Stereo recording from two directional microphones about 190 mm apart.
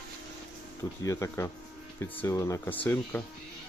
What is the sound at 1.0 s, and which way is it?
Speech, 15° left (ahead or behind).